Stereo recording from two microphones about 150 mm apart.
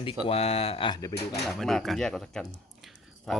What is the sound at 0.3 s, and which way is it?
Speech, 40° left (ahead or behind).